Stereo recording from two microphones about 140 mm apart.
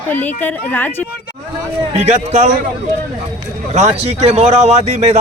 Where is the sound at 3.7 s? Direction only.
50° right (ahead or behind).